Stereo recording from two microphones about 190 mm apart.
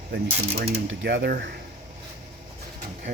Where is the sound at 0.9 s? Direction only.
65° right (ahead or behind).